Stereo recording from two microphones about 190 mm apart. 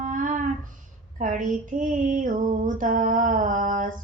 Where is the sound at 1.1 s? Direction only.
40° right (ahead or behind).